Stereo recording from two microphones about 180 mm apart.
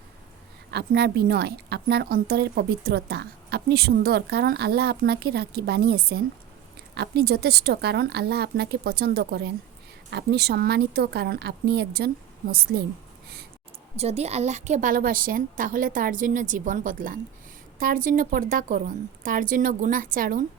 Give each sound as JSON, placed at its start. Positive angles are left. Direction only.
{"t": 0.7, "sound": "a woman's voice", "side_deg": -65}
{"t": 13.9, "sound": "a woman's voice", "side_deg": -35}